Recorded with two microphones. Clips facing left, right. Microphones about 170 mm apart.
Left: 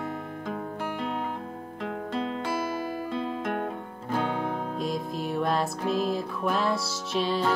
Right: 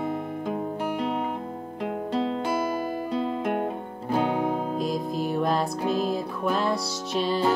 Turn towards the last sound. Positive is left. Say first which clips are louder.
# right 2 dB
turn(degrees=0)  # may be behind; listen again after turning